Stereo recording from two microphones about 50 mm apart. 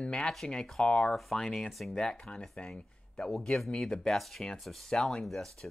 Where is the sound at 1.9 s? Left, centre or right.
Centre.